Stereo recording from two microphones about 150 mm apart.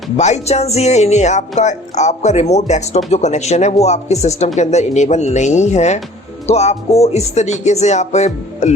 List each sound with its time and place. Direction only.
0.2 s speech: 50° left (ahead or behind)